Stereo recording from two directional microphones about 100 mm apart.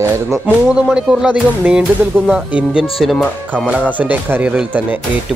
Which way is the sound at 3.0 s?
Centre (ahead or behind).